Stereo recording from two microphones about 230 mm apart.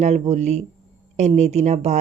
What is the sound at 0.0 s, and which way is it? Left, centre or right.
Speech, right.